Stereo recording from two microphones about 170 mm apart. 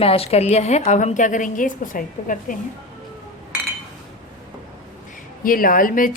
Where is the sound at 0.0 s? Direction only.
35° left (ahead or behind); by 2.6 s 50° left (ahead or behind).